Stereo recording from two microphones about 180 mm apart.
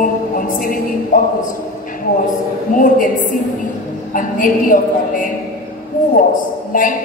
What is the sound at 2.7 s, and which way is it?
A woman's voice, 45° left (ahead or behind).